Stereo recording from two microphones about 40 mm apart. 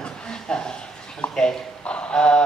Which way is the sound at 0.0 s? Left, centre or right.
Left.